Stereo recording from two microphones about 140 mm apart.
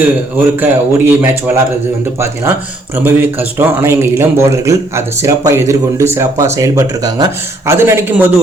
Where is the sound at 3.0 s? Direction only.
15° right (ahead or behind).